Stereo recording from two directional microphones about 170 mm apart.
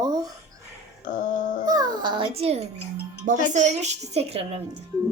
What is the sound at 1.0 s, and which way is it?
Dog, 50° left (ahead or behind).